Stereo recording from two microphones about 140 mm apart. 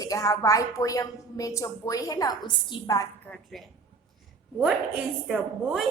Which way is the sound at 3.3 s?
Centre (ahead or behind).